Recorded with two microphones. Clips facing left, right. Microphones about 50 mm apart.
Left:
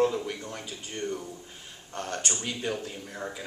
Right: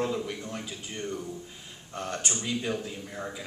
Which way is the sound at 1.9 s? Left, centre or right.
Left.